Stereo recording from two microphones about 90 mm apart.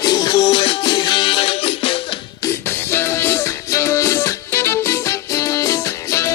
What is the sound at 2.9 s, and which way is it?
Music, 30° left (ahead or behind).